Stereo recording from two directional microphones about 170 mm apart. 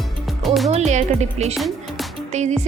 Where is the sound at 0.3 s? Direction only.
Centre (ahead or behind).